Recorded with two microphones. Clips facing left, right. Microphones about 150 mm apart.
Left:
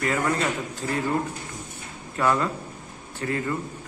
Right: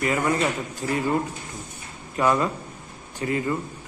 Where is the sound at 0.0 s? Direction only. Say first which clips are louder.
Right 1 dB; 15° right (ahead or behind).